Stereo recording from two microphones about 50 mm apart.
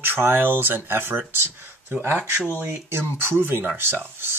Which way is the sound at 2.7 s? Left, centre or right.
Right.